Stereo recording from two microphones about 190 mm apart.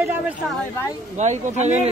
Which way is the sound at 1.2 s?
35° right (ahead or behind).